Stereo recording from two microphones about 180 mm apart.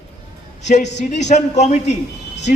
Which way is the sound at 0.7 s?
50° left (ahead or behind).